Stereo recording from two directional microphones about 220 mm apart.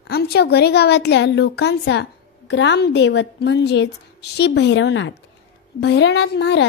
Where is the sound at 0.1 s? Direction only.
50° left (ahead or behind).